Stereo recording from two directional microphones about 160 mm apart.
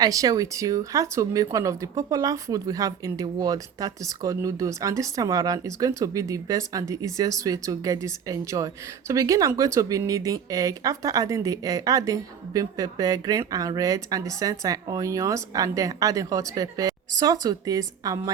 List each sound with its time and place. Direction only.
0.0 s speech: 20° right (ahead or behind)